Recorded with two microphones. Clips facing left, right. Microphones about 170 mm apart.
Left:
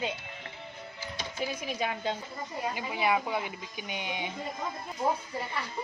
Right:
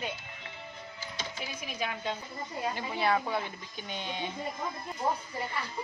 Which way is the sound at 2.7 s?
10° left (ahead or behind).